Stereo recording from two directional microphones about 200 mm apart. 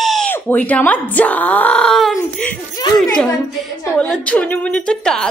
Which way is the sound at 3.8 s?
5° left (ahead or behind).